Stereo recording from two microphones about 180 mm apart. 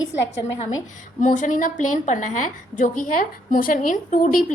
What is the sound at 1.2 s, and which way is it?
A woman's voice, 45° left (ahead or behind).